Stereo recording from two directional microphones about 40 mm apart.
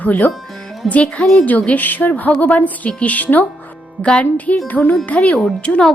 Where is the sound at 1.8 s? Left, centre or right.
Left.